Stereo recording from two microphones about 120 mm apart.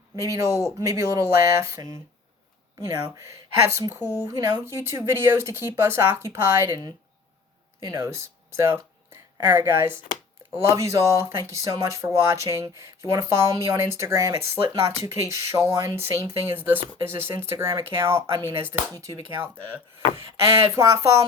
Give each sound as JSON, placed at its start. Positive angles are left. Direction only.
{"t": 0.2, "sound": "speech", "side_deg": -25}
{"t": 4.0, "sound": "speech", "side_deg": 30}
{"t": 4.3, "sound": "speech", "side_deg": -25}
{"t": 7.9, "sound": "speech", "side_deg": -25}